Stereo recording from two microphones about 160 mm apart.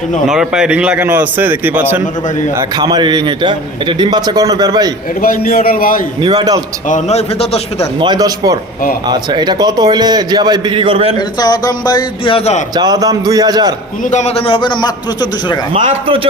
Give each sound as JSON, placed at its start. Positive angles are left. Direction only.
{"t": 0.3, "sound": "a man's voice", "side_deg": -5}
{"t": 2.6, "sound": "a man's voice", "side_deg": -25}
{"t": 5.2, "sound": "a man's voice", "side_deg": 60}
{"t": 6.2, "sound": "a man's voice", "side_deg": -25}
{"t": 6.8, "sound": "a man's voice", "side_deg": 45}
{"t": 7.9, "sound": "a man's voice", "side_deg": -25}
{"t": 11.3, "sound": "speech", "side_deg": 25}
{"t": 12.7, "sound": "a man's voice", "side_deg": -25}
{"t": 14.0, "sound": "a man's voice", "side_deg": 45}
{"t": 15.7, "sound": "a man's voice", "side_deg": -35}